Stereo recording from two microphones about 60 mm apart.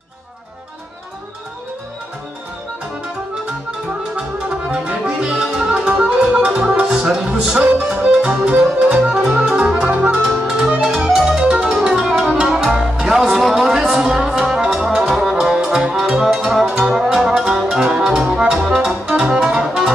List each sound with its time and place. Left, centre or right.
4.1 s music: centre
10.3 s music: centre